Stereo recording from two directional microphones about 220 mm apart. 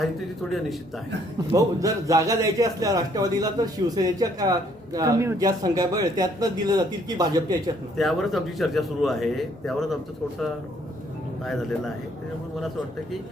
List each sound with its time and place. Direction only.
1.5 s a man's voice: 15° right (ahead or behind)
7.9 s speech: centre (ahead or behind)